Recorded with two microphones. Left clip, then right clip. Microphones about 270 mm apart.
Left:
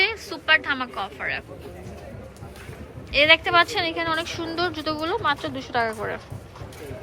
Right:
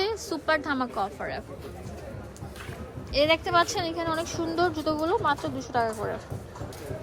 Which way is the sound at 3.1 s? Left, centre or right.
Centre.